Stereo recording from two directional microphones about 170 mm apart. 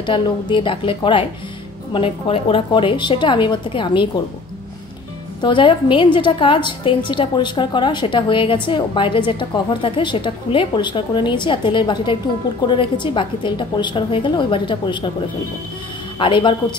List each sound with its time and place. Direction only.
0.0 s a woman's voice: 30° left (ahead or behind)
5.4 s a woman's voice: 30° left (ahead or behind)
16.2 s a woman's voice: 30° left (ahead or behind)